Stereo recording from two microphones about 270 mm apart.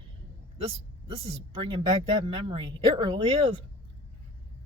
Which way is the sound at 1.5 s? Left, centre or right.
Centre.